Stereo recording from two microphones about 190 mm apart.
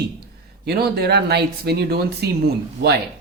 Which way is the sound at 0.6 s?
55° right (ahead or behind).